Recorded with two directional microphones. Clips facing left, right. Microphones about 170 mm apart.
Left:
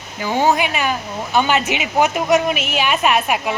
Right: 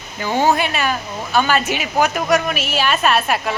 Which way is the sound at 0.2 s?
15° left (ahead or behind).